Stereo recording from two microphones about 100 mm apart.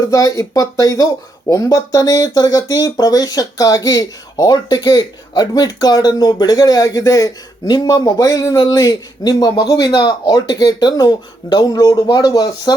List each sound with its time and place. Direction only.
0.0 s speech: 35° left (ahead or behind)